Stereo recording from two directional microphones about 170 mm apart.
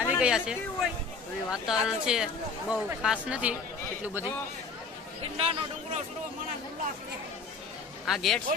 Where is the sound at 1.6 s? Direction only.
5° right (ahead or behind).